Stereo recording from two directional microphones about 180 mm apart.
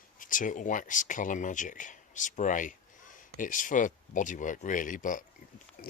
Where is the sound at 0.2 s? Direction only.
45° left (ahead or behind).